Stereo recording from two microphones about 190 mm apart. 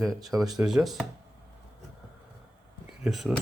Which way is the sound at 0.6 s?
5° right (ahead or behind).